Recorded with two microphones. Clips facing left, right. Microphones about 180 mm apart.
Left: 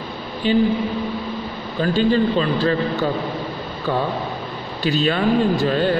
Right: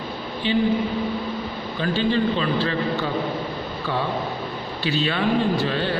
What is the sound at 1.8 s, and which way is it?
A man's voice, 40° left (ahead or behind).